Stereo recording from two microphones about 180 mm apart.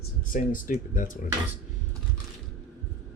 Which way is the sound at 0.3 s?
50° left (ahead or behind).